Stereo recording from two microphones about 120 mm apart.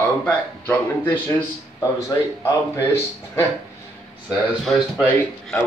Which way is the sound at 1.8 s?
25° left (ahead or behind).